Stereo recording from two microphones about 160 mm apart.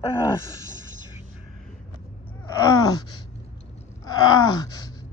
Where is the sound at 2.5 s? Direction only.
20° left (ahead or behind).